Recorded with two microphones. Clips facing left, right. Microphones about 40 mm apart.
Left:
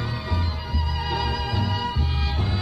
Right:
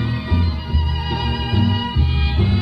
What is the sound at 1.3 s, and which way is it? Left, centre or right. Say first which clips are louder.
Music: right 5 dB; centre.